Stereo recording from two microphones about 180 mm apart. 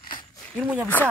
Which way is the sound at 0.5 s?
5° right (ahead or behind).